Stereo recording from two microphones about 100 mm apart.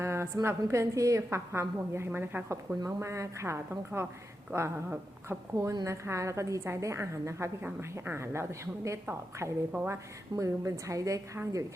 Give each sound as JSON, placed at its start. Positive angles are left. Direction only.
{"t": 0.0, "sound": "a sound", "side_deg": -25}
{"t": 0.4, "sound": "a woman's voice", "side_deg": -30}
{"t": 2.8, "sound": "a woman's voice", "side_deg": -30}
{"t": 10.3, "sound": "a woman's voice", "side_deg": -30}